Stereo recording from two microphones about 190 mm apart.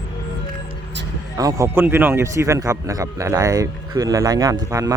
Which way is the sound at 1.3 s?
15° right (ahead or behind).